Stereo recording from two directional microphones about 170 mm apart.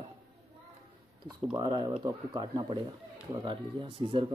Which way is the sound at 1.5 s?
30° right (ahead or behind).